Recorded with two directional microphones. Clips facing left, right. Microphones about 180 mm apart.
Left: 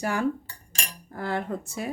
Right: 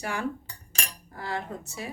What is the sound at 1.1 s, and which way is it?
Cutlery, 55° left (ahead or behind).